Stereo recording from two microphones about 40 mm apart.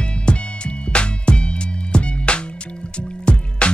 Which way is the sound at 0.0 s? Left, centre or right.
Left.